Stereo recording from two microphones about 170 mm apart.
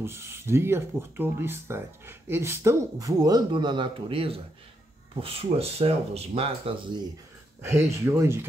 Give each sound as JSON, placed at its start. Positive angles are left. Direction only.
{"t": 0.0, "sound": "speech", "side_deg": -15}
{"t": 7.6, "sound": "speech", "side_deg": -15}